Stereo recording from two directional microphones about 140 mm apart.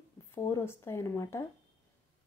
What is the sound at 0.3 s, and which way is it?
A woman's voice, 15° left (ahead or behind).